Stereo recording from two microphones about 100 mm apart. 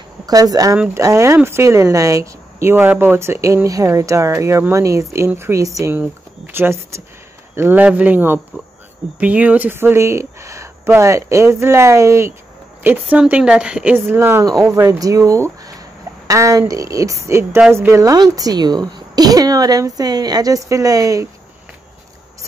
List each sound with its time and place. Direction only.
0.3 s a woman's voice: 35° right (ahead or behind)
5.9 s speech: 20° right (ahead or behind)
12.8 s speech: 15° right (ahead or behind)
13.9 s speech: 20° right (ahead or behind)
14.7 s a woman's voice: 30° right (ahead or behind)